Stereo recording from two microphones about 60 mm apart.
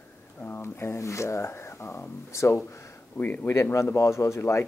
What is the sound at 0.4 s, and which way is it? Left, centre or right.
Speech, left.